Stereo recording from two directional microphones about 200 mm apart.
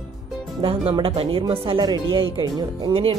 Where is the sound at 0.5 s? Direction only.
25° right (ahead or behind).